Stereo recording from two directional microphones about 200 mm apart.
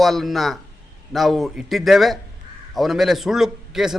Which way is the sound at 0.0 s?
Centre (ahead or behind).